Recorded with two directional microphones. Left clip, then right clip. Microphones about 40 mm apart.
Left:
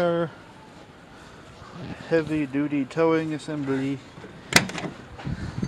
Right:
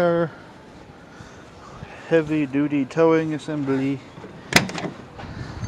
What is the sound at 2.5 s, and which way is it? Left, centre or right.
Speech, right.